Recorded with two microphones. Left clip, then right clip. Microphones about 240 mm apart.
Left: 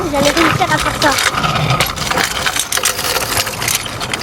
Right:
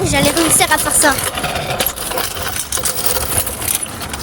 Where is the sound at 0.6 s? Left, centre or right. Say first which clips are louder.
Even; right.